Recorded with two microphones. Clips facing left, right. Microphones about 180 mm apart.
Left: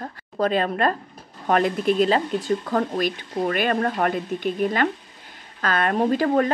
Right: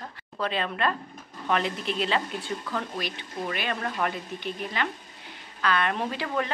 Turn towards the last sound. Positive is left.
turn(degrees=45)  # may be behind; listen again after turning